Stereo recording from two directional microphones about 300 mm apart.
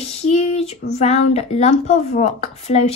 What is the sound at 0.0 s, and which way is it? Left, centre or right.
Speech, left.